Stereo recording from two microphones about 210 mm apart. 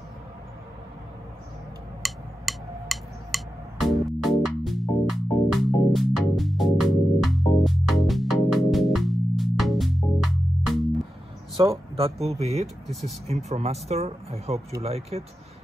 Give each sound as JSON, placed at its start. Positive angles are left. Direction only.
{"t": 2.0, "sound": "music", "side_deg": 0}
{"t": 11.5, "sound": "speech", "side_deg": -15}
{"t": 12.0, "sound": "speech", "side_deg": -30}